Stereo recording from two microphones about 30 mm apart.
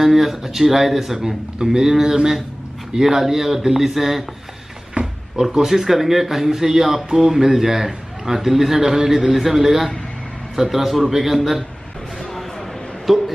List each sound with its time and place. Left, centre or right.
0.0 s a man's voice: centre
5.0 s a sound: right
5.3 s a man's voice: centre
13.1 s a man's voice: centre